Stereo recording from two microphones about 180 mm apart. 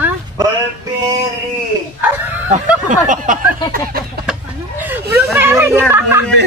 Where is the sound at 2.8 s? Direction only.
45° right (ahead or behind).